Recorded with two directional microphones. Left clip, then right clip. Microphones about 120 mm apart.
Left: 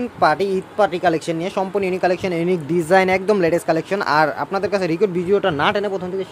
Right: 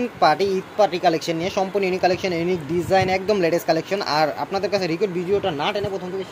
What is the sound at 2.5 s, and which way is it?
Speech, 50° left (ahead or behind).